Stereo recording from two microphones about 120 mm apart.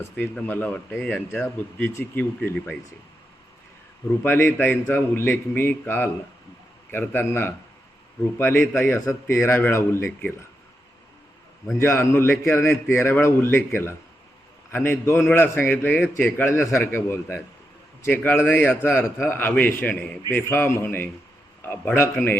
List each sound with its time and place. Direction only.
0.2 s a man's voice: 15° left (ahead or behind)
4.2 s a man's voice: 20° left (ahead or behind)
11.8 s a man's voice: 20° left (ahead or behind)
14.7 s a man's voice: 20° left (ahead or behind)